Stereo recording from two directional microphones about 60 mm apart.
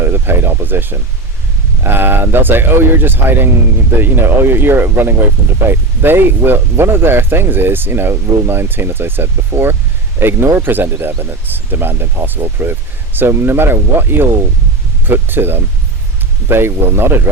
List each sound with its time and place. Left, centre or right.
0.0 s speech: right